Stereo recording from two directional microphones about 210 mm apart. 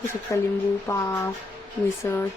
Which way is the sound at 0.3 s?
15° left (ahead or behind).